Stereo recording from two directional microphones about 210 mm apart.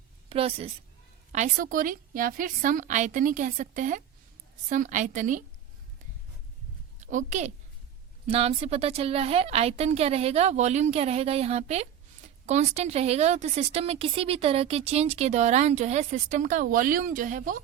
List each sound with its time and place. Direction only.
0.3 s a woman's voice: 25° right (ahead or behind)
7.0 s a woman's voice: 35° right (ahead or behind)